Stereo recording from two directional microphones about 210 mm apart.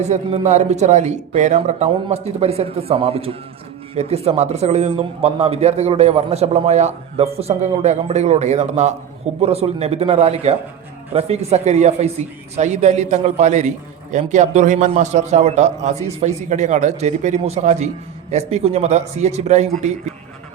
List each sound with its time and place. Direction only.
0.0 s a man's voice: 35° right (ahead or behind)